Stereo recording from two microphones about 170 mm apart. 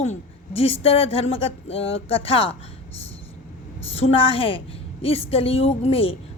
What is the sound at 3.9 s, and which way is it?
A woman's voice, 35° left (ahead or behind).